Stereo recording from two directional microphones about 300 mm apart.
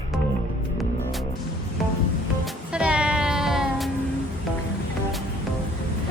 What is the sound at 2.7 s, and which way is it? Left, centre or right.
Music, centre.